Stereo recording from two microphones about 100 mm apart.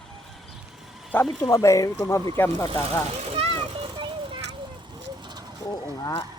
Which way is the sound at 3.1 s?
80° right.